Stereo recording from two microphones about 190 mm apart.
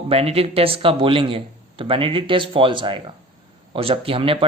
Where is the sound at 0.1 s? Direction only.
30° right (ahead or behind).